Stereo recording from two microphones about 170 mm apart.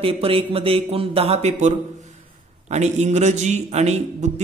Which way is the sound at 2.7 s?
40° right (ahead or behind).